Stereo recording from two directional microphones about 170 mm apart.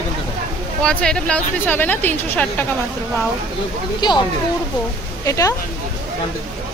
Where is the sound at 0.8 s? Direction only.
5° left (ahead or behind).